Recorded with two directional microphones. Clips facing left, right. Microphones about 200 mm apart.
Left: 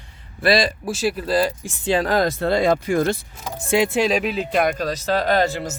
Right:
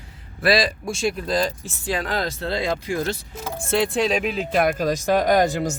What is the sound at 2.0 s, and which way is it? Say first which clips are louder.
Speech: left 6 dB; 45° left (ahead or behind).